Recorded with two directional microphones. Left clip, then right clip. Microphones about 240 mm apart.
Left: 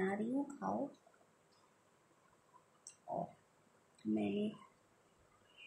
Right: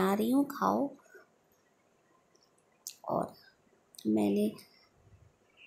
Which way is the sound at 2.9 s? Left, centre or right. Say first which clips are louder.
Right 14 dB; right.